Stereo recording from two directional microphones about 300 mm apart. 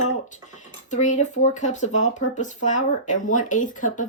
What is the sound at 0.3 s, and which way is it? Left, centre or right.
Speech, left.